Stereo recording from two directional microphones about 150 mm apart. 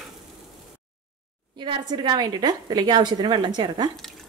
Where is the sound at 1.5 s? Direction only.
30° right (ahead or behind).